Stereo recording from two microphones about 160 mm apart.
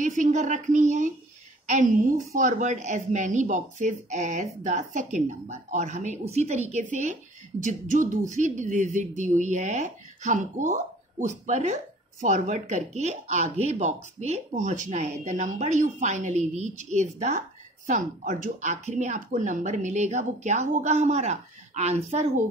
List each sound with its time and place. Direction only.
0.0 s a woman's voice: 50° right (ahead or behind)